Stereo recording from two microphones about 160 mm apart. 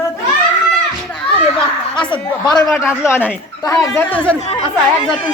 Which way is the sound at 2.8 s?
15° left (ahead or behind).